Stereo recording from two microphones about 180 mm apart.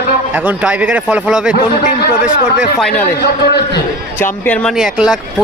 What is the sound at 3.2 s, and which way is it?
Speech, 60° left (ahead or behind).